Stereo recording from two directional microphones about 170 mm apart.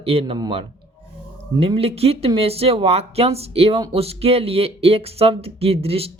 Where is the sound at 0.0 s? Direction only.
35° right (ahead or behind).